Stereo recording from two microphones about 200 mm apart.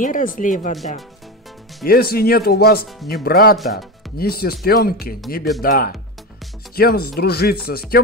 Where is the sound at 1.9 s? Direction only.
50° left (ahead or behind).